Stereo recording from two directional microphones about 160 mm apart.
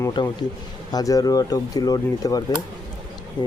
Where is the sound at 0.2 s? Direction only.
30° left (ahead or behind).